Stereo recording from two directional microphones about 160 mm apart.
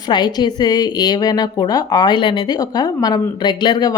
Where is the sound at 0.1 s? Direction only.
25° left (ahead or behind).